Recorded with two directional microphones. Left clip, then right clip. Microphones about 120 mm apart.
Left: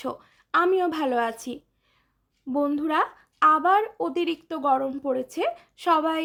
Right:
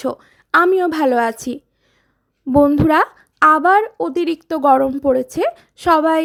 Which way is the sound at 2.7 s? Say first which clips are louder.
Right 10 dB; 55° right (ahead or behind).